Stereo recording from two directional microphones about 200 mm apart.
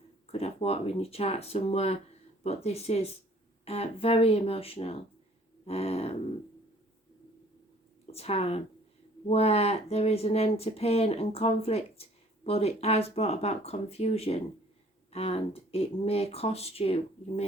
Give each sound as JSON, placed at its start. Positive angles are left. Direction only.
{"t": 0.3, "sound": "speech", "side_deg": 30}
{"t": 8.0, "sound": "speech", "side_deg": 30}